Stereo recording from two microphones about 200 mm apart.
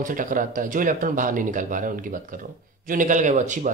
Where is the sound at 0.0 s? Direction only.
40° right (ahead or behind).